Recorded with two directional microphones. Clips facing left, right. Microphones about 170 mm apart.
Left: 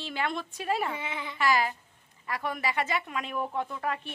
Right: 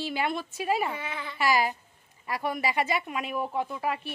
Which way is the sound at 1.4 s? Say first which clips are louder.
Right 1 dB; 10° right (ahead or behind).